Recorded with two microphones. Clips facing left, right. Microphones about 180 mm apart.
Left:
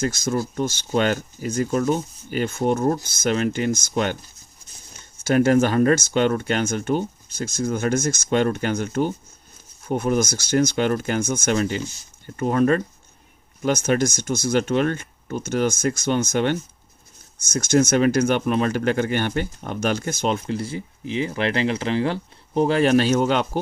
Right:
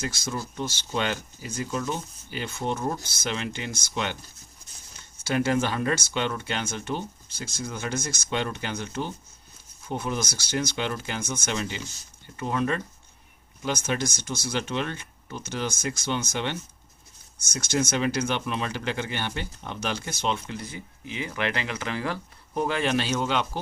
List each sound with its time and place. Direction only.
0.0 s speech: 45° left (ahead or behind)
5.2 s speech: 45° left (ahead or behind)